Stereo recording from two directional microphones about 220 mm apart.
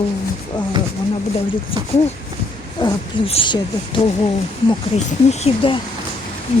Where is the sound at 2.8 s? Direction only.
25° left (ahead or behind).